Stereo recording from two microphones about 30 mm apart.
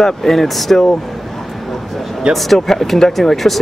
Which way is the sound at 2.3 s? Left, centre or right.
Centre.